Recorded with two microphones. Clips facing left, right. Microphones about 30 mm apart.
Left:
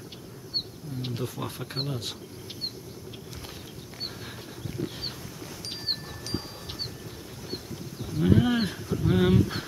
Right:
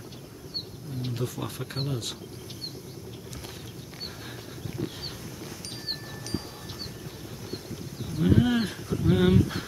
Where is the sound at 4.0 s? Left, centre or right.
Centre.